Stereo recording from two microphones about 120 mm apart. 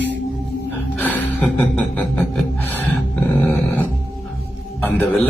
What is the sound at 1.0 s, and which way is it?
Gasp, 15° left (ahead or behind).